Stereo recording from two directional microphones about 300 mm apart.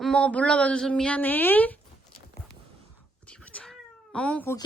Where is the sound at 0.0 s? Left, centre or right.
Centre.